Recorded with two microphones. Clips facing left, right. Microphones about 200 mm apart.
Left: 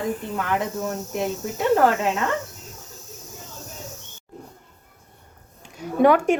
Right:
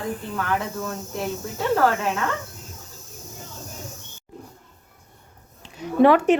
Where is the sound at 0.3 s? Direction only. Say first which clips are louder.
Right 1 dB; 20° left (ahead or behind).